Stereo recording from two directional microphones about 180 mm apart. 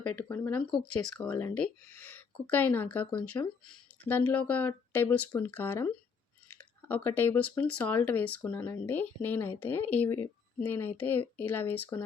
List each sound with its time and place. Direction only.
0.2 s speech: 10° left (ahead or behind)